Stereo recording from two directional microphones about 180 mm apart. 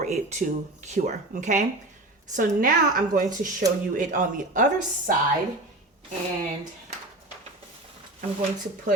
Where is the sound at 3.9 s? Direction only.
45° right (ahead or behind).